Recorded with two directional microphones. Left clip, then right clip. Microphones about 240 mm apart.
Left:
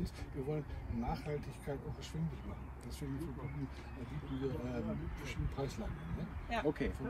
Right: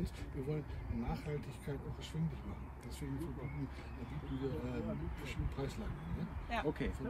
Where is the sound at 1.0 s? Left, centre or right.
Centre.